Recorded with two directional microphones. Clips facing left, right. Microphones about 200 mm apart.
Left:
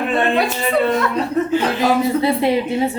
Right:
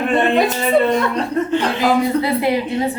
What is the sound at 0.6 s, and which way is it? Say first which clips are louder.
A woman's voice: right 2 dB; centre (ahead or behind).